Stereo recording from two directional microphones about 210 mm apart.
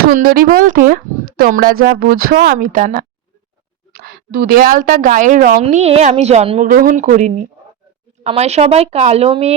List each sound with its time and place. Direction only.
0.0 s speech: 45° right (ahead or behind)
5.5 s speech: 30° right (ahead or behind)
6.7 s speech: 40° right (ahead or behind)